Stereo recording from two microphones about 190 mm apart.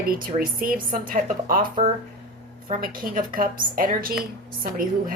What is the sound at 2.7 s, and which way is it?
Speech, 50° right (ahead or behind).